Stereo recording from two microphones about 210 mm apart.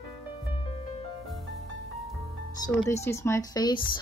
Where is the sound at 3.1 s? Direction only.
15° left (ahead or behind).